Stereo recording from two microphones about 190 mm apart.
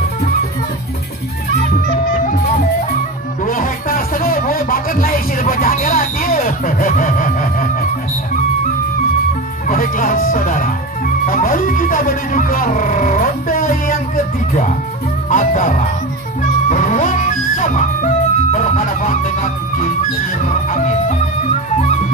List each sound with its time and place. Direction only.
3.4 s music: 45° left (ahead or behind)
9.7 s music: 45° left (ahead or behind)